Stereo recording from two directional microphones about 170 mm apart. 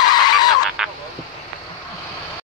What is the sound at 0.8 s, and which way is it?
Vehicle, 5° right (ahead or behind).